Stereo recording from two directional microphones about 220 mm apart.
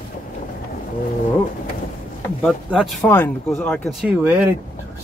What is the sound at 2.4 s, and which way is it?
Speech, centre (ahead or behind).